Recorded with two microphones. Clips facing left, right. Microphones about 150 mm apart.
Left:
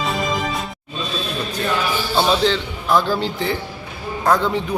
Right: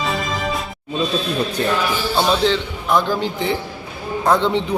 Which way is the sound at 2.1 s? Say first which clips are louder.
Left 1 dB; 5° left (ahead or behind).